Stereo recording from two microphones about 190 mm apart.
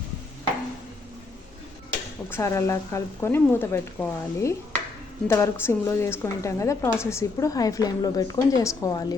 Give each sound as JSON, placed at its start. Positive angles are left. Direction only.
{"t": 2.3, "sound": "a woman's voice", "side_deg": 15}